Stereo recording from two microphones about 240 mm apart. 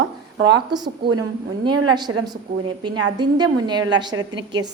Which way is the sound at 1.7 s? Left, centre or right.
Right.